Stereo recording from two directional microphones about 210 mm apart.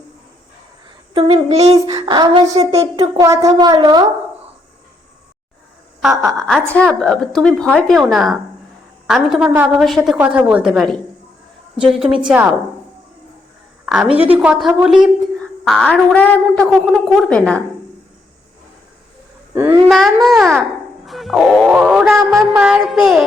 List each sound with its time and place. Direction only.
0.9 s a sound: 25° right (ahead or behind)
2.6 s speech: 25° right (ahead or behind)
6.0 s a woman's voice: centre (ahead or behind)
13.8 s a woman's voice: 5° right (ahead or behind)
19.5 s a child's voice: 10° right (ahead or behind)
20.2 s a woman's voice: centre (ahead or behind)